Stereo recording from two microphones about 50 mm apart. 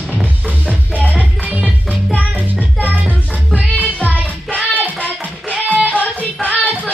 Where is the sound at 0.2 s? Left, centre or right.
Right.